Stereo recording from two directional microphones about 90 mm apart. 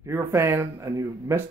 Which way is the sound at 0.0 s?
30° right (ahead or behind).